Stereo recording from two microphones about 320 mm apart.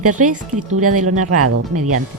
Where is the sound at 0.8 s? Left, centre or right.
Right.